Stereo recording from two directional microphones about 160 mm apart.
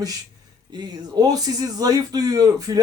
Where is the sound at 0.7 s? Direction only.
25° right (ahead or behind).